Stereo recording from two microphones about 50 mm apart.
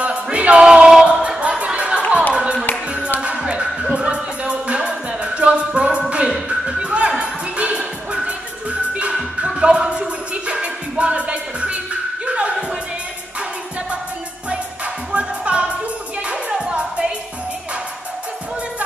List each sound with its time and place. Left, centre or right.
0.0 s music: right
6.2 s music: centre
15.1 s music: right